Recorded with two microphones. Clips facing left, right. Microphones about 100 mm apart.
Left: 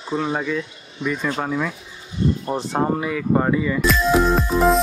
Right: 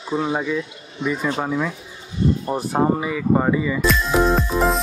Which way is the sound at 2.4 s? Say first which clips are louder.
Right 2 dB; 10° right (ahead or behind).